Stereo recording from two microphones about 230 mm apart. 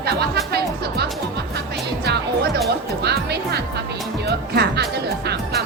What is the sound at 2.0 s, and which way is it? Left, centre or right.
Speech, right.